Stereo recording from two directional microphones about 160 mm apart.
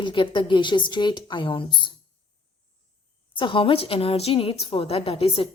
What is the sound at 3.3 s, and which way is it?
A woman's voice, 30° left (ahead or behind).